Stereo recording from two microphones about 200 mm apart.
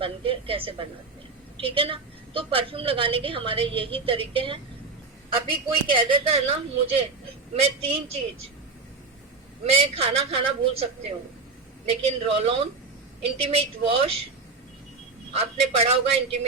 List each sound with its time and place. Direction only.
0.0 s a woman's voice: 25° right (ahead or behind)
9.6 s a woman's voice: 30° right (ahead or behind)
15.3 s a woman's voice: 30° right (ahead or behind)